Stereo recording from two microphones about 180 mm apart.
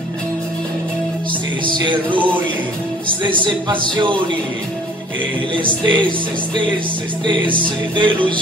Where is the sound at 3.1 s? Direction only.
25° right (ahead or behind).